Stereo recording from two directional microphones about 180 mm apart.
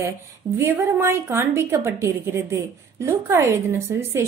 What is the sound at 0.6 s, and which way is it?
A woman's voice, 15° right (ahead or behind).